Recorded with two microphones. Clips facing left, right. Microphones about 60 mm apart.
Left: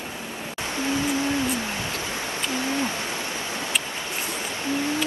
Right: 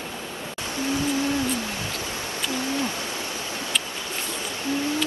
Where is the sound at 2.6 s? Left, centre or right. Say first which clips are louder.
Left 1 dB; left.